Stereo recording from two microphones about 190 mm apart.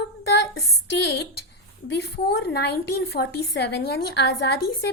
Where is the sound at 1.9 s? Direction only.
60° left (ahead or behind).